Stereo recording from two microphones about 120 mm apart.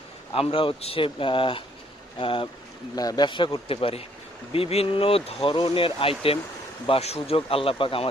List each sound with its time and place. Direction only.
0.3 s speech: 50° left (ahead or behind)
2.9 s speech: 30° left (ahead or behind); by 8.1 s 50° left (ahead or behind)